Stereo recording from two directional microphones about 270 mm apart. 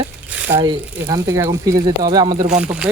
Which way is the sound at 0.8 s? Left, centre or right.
Centre.